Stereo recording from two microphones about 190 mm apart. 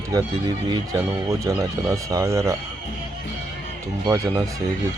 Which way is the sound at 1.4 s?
15° right (ahead or behind).